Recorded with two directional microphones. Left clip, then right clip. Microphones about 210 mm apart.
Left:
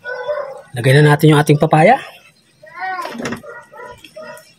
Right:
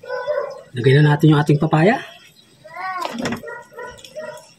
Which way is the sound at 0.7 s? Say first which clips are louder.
Left 4 dB; 45° left (ahead or behind).